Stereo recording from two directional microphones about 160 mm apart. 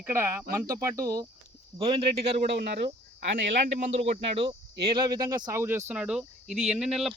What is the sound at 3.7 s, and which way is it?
Speech, 45° right (ahead or behind).